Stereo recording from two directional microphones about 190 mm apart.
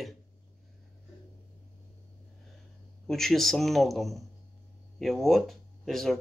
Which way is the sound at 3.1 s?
Centre (ahead or behind).